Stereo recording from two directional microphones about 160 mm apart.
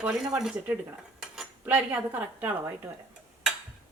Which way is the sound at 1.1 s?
5° right (ahead or behind).